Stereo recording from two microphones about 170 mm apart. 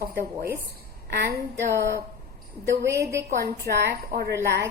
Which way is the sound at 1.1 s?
75° right (ahead or behind).